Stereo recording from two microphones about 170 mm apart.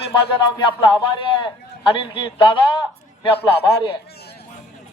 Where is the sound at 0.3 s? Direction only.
30° left (ahead or behind).